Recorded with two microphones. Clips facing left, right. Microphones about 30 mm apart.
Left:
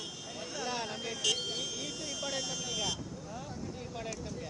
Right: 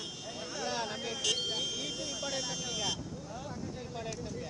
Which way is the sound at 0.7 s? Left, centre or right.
Right.